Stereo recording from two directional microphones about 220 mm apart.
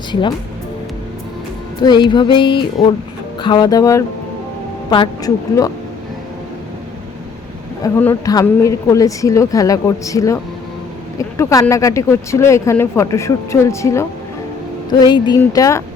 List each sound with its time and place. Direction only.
0.1 s music: 20° left (ahead or behind)
1.8 s music: 20° left (ahead or behind)
3.4 s speech: 20° left (ahead or behind)
7.8 s speech: 10° left (ahead or behind)